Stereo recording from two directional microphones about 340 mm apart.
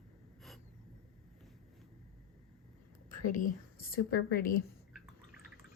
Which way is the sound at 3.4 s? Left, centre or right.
Left.